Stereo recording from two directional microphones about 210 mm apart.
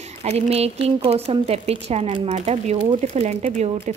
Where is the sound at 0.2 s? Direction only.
30° right (ahead or behind).